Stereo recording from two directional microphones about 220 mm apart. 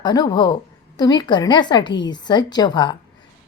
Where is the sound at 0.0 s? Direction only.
20° left (ahead or behind).